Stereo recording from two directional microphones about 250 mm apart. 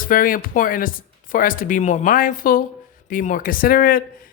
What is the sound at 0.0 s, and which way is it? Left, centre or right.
Speech, left.